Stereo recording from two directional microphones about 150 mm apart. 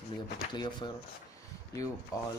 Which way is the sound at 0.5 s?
30° left (ahead or behind).